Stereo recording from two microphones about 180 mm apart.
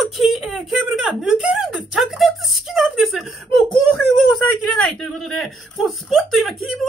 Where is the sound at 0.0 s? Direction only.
Centre (ahead or behind).